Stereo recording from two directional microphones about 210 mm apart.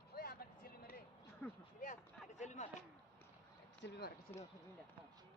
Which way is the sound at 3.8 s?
50° left (ahead or behind).